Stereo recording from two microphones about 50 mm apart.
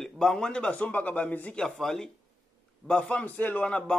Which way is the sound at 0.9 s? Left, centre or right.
Left.